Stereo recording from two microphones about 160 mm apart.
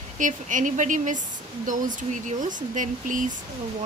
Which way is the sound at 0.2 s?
55° right (ahead or behind).